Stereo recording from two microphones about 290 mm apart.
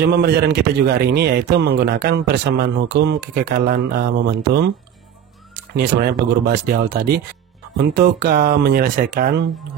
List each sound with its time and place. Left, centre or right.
0.0 s a man's voice: right
5.8 s a man's voice: right